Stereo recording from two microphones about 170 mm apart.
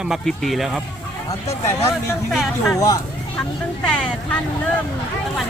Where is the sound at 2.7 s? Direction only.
20° left (ahead or behind).